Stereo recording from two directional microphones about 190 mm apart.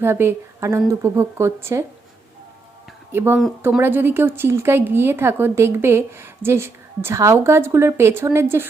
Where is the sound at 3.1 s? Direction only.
10° right (ahead or behind).